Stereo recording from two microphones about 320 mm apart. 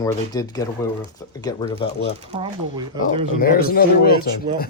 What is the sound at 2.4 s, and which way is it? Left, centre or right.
Speech, centre.